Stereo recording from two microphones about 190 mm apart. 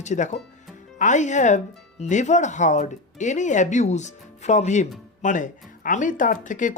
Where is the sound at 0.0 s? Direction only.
40° left (ahead or behind).